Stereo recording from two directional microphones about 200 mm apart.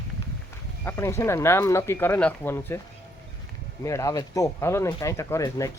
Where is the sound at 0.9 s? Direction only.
15° left (ahead or behind).